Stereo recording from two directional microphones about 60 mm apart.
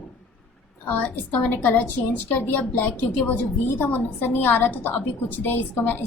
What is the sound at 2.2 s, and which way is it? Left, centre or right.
Speech, left.